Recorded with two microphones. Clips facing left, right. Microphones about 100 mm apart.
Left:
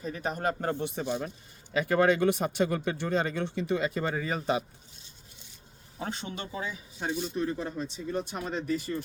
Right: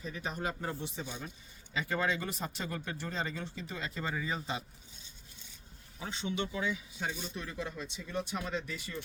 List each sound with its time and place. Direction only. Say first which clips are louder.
0.0 s speech: left 7 dB; 50° left (ahead or behind); by 4.6 s 65° left (ahead or behind)
6.0 s speech: even; 50° left (ahead or behind)